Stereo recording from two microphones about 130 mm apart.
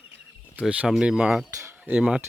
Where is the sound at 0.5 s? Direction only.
10° right (ahead or behind).